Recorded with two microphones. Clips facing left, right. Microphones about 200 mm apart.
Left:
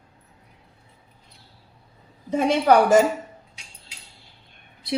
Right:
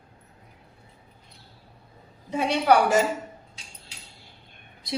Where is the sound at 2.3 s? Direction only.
45° left (ahead or behind).